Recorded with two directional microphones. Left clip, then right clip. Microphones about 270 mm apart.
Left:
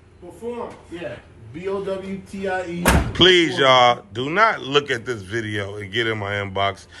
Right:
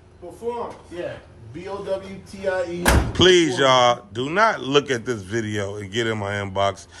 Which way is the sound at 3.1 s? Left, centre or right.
Centre.